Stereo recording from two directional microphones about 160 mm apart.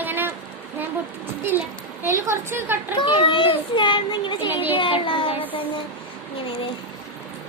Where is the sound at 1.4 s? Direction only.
15° right (ahead or behind).